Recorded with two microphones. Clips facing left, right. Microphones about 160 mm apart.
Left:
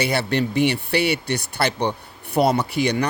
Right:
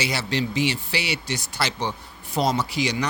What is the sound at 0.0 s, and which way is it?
Speech, 55° left (ahead or behind).